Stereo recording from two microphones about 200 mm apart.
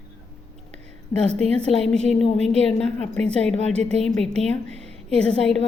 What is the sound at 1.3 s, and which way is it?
Speech, 30° right (ahead or behind).